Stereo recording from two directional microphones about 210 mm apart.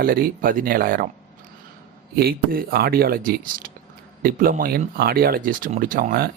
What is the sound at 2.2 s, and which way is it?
Speech, 45° right (ahead or behind).